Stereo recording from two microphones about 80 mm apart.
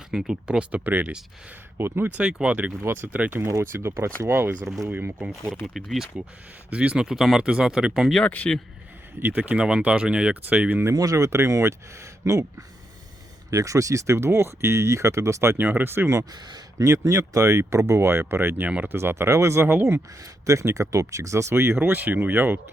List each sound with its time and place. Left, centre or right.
0.1 s speech: centre
0.9 s speech: right
2.8 s speech: right
3.4 s speech: right
5.6 s speech: centre
6.7 s speech: centre
8.3 s speech: centre
9.2 s speech: right
10.9 s speech: right
13.5 s speech: right
20.5 s speech: right